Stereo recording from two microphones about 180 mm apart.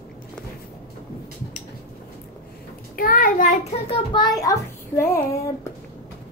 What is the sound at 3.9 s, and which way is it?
A child's voice, 25° left (ahead or behind).